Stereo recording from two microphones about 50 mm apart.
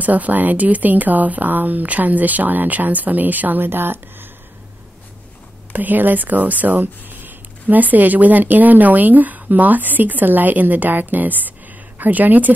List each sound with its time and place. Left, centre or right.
0.0 s speech: right
5.7 s speech: right